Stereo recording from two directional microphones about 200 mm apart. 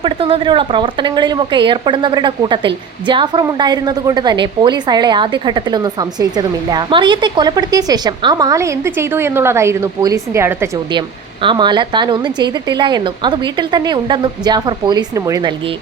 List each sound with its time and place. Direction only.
0.0 s a woman's voice: 25° right (ahead or behind)